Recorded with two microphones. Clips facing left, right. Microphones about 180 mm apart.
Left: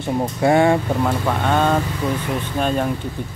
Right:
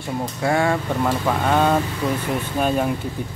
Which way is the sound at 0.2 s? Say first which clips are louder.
Left 5 dB; 25° left (ahead or behind).